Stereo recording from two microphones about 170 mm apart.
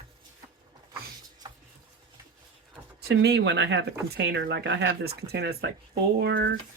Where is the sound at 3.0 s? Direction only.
70° right (ahead or behind); by 3.9 s 90° right.